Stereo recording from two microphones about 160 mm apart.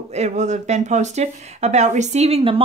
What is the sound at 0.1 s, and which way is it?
A woman's voice, 45° right (ahead or behind).